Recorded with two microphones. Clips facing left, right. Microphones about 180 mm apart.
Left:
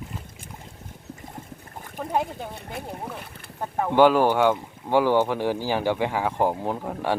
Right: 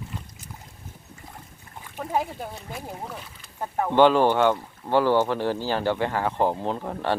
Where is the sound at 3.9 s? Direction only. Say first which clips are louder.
Even; 10° left (ahead or behind).